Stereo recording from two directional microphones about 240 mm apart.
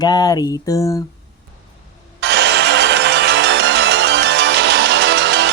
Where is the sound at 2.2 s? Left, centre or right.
Right.